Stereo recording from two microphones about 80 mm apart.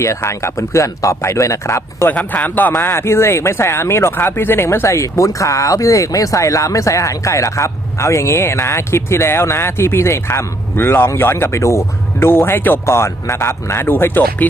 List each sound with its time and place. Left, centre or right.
0.0 s speech: left
2.0 s speech: left